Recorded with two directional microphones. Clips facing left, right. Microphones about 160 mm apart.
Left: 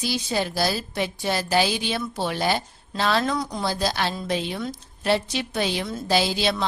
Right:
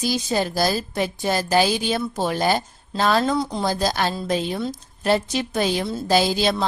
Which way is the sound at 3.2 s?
30° right (ahead or behind).